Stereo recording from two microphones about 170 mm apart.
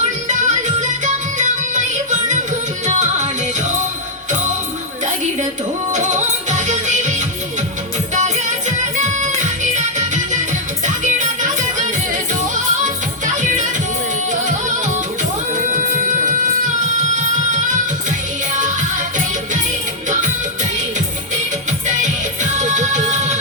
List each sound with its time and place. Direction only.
0.3 s music: 45° right (ahead or behind)
5.9 s music: 45° right (ahead or behind)
15.6 s music: 50° right (ahead or behind)
18.5 s music: 45° right (ahead or behind)
21.7 s music: 45° right (ahead or behind)